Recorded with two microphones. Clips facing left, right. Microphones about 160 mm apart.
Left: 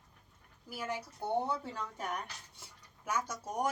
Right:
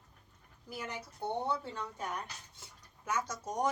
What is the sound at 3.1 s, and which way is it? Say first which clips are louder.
Speech: even; 10° left (ahead or behind).